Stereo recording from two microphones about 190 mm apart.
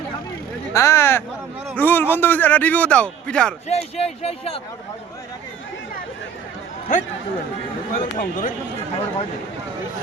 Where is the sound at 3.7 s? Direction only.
35° left (ahead or behind).